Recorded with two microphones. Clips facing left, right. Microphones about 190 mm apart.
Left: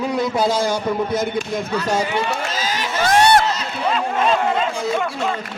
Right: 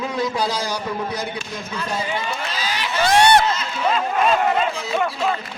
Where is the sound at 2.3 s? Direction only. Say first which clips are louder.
Left 3 dB; 45° left (ahead or behind).